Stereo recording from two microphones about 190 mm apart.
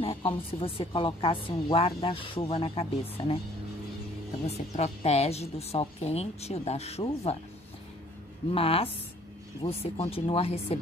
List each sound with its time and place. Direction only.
0.0 s speech: 30° left (ahead or behind)
4.5 s a woman's voice: 35° left (ahead or behind)
8.5 s a woman's voice: 30° left (ahead or behind)